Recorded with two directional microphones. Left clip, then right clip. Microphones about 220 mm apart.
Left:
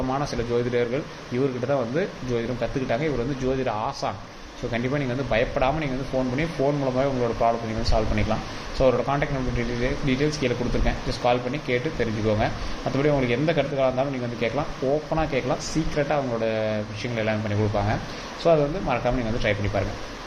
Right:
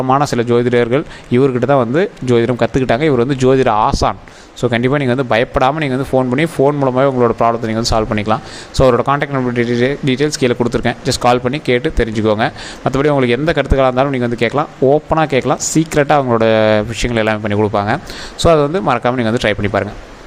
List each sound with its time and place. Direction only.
0.1 s speech: 45° right (ahead or behind)